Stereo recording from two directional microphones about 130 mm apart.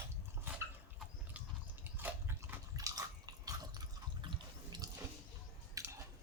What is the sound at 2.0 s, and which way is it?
Biting, 15° right (ahead or behind).